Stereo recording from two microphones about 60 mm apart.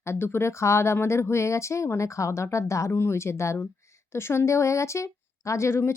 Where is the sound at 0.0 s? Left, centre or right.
Left.